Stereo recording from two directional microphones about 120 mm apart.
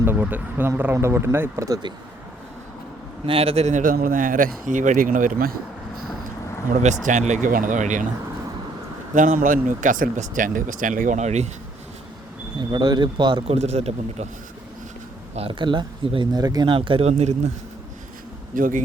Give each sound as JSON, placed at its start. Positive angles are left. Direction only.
{"t": 0.0, "sound": "speech", "side_deg": -15}
{"t": 3.2, "sound": "speech", "side_deg": -55}
{"t": 6.8, "sound": "speech", "side_deg": -85}
{"t": 9.1, "sound": "speech", "side_deg": -90}
{"t": 12.5, "sound": "speech", "side_deg": -40}
{"t": 13.6, "sound": "speech", "side_deg": -60}
{"t": 15.4, "sound": "speech", "side_deg": -45}
{"t": 16.7, "sound": "speech", "side_deg": -50}
{"t": 18.5, "sound": "speech", "side_deg": -90}